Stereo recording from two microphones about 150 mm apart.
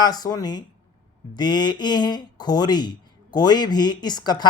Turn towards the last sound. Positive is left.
turn(degrees=30)  # may be behind; listen again after turning